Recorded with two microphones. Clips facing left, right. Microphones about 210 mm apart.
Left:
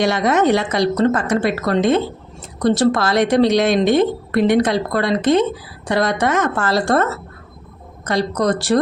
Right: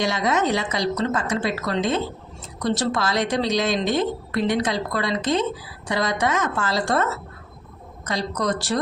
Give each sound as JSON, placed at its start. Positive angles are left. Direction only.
{"t": 0.0, "sound": "a woman's voice", "side_deg": 60}